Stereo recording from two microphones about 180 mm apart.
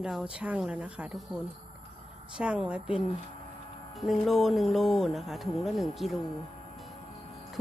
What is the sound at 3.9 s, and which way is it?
Speech, centre (ahead or behind).